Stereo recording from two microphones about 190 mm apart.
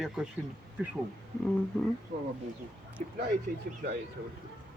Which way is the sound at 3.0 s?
35° right (ahead or behind).